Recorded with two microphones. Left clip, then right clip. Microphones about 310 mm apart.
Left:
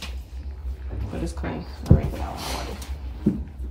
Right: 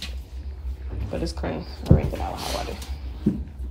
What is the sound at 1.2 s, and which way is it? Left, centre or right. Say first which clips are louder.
Speech: right 1 dB; centre.